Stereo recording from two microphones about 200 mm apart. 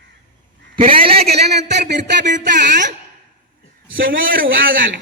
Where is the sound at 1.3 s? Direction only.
55° right (ahead or behind).